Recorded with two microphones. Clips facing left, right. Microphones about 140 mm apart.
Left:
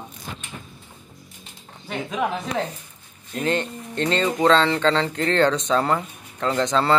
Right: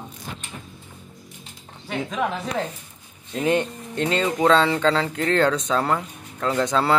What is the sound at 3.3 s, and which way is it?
Speech, 15° right (ahead or behind).